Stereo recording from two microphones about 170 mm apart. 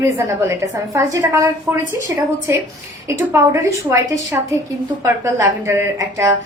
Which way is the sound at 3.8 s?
15° right (ahead or behind).